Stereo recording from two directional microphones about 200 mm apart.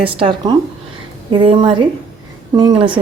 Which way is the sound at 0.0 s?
25° right (ahead or behind).